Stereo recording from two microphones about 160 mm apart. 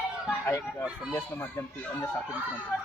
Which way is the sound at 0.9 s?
5° right (ahead or behind).